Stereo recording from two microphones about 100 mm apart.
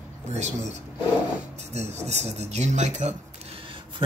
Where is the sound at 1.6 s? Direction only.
90° right.